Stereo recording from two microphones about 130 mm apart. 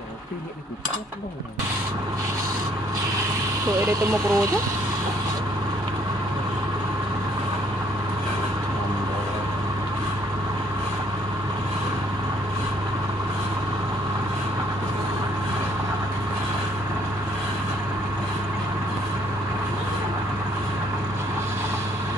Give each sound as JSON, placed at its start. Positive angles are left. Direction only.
{"t": 3.8, "sound": "speech", "side_deg": -25}